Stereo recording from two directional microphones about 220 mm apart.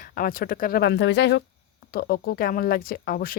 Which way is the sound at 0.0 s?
40° left (ahead or behind).